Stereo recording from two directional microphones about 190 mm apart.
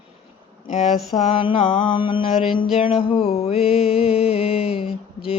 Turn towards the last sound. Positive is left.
turn(degrees=30)  # may be behind; listen again after turning